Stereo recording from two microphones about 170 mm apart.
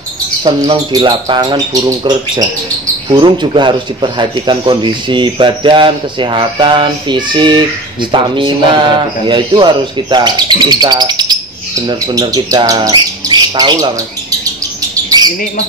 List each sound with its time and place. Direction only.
0.4 s speech: 25° right (ahead or behind)